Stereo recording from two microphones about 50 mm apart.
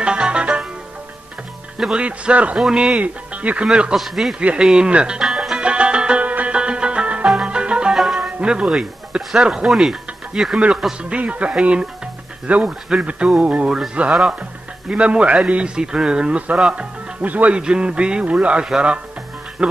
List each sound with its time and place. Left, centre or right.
0.0 s music: centre
2.0 s a man's voice: right
3.0 s a man's voice: right
3.9 s speech: centre
4.4 s a man's voice: right
5.2 s music: centre
5.6 s music: right
6.2 s music: right
6.5 s music: centre
7.9 s music: centre
8.2 s speech: centre
11.1 s a man's voice: right